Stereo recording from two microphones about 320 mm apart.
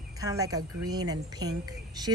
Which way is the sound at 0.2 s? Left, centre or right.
Centre.